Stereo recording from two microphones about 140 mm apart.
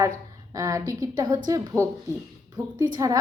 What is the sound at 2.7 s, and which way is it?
Speech, 25° right (ahead or behind).